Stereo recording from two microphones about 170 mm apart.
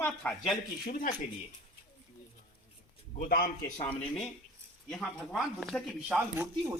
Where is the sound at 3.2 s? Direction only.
60° left (ahead or behind).